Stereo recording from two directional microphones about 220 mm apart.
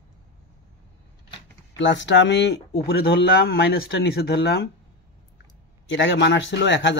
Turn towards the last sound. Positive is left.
turn(degrees=55)  # may be behind; listen again after turning